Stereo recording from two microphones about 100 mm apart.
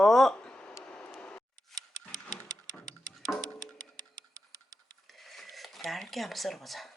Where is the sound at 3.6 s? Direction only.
40° right (ahead or behind).